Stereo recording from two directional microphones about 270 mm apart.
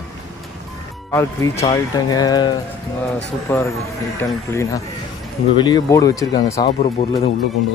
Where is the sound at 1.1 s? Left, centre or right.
Centre.